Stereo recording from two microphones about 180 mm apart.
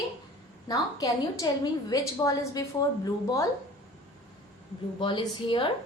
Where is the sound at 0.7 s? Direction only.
20° left (ahead or behind).